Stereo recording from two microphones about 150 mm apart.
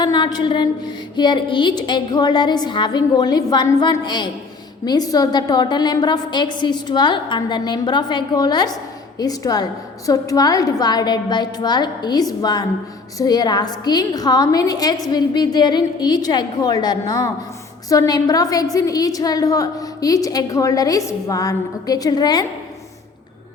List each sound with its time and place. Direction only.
0.0 s a woman's voice: 30° left (ahead or behind)